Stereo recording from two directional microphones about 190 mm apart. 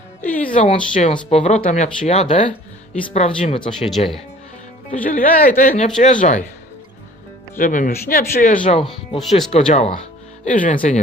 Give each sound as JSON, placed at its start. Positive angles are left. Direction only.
{"t": 0.2, "sound": "speech", "side_deg": 10}
{"t": 0.5, "sound": "speech", "side_deg": 35}
{"t": 3.7, "sound": "speech", "side_deg": 0}
{"t": 5.0, "sound": "speech", "side_deg": 45}
{"t": 7.6, "sound": "speech", "side_deg": 45}
{"t": 8.9, "sound": "speech", "side_deg": 0}
{"t": 9.5, "sound": "speech", "side_deg": 35}